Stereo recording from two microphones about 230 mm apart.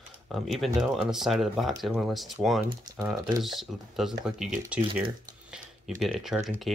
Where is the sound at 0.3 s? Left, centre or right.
Centre.